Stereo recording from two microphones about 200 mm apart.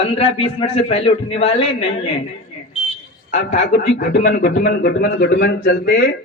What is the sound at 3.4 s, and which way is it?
A man's voice, 65° left (ahead or behind).